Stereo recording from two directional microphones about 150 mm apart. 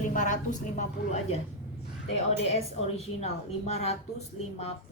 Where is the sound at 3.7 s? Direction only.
45° left (ahead or behind).